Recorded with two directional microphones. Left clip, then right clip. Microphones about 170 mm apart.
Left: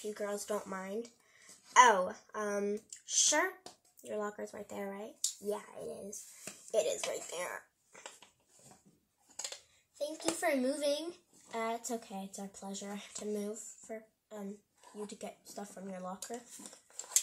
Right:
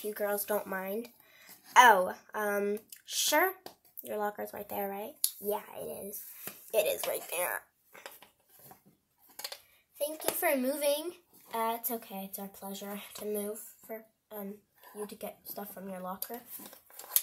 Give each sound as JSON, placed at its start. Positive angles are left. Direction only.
{"t": 0.1, "sound": "speech", "side_deg": -35}
{"t": 10.4, "sound": "speech", "side_deg": -30}
{"t": 16.6, "sound": "a sound", "side_deg": -10}